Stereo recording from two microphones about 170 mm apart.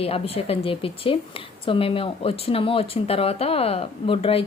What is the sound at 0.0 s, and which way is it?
Speech, 35° left (ahead or behind).